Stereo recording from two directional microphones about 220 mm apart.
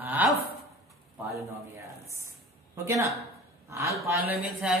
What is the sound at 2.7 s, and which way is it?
A man's voice, 15° right (ahead or behind).